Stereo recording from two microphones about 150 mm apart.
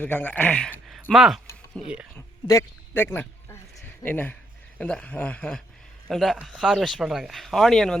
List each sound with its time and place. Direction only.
0.0 s speech: 10° left (ahead or behind)
2.5 s speech: 20° left (ahead or behind)